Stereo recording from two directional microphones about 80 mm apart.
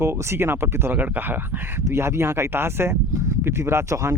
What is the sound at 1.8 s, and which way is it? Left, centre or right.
Speech, right.